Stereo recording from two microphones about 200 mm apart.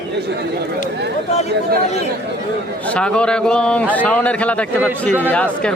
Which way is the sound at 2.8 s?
5° left (ahead or behind).